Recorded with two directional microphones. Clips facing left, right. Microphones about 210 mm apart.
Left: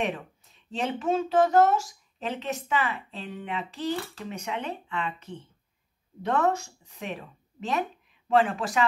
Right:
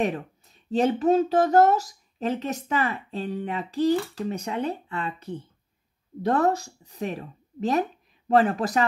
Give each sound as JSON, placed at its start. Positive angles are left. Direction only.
{"t": 0.7, "sound": "speech", "side_deg": -40}